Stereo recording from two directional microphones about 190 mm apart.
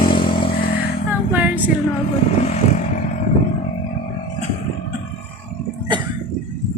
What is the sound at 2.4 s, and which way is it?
Vehicle, 35° left (ahead or behind).